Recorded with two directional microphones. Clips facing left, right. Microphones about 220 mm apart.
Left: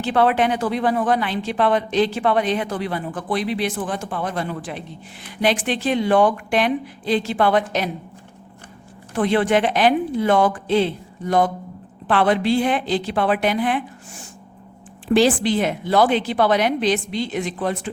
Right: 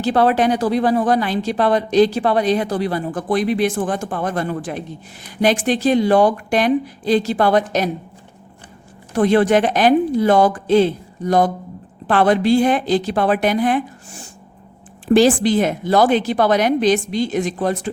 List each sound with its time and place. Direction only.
0.0 s speech: 40° right (ahead or behind)
9.1 s a woman's voice: 40° right (ahead or behind)